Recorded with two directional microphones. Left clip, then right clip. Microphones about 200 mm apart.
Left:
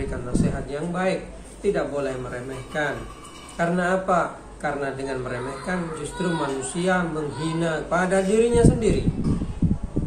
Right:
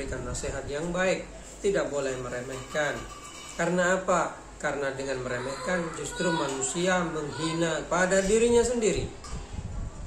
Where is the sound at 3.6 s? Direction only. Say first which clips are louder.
Left 3 dB; 5° right (ahead or behind).